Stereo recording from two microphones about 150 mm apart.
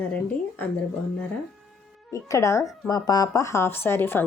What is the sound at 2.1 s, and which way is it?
Speech, 20° left (ahead or behind).